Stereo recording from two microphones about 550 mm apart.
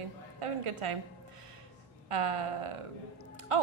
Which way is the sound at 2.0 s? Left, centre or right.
Right.